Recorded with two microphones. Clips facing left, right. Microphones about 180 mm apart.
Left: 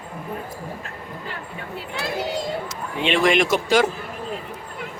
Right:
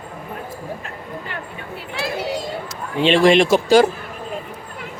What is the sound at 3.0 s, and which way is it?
Speech, 30° right (ahead or behind).